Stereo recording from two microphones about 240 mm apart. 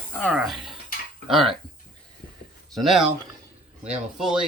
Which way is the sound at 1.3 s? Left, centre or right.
Centre.